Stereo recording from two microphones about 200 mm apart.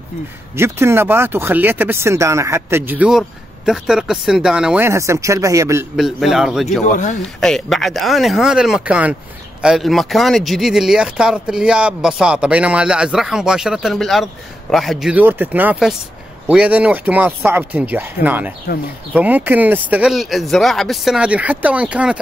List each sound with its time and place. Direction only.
0.6 s speech: 10° right (ahead or behind)
5.9 s speech: centre (ahead or behind)
6.8 s speech: 35° left (ahead or behind)
7.3 s speech: centre (ahead or behind)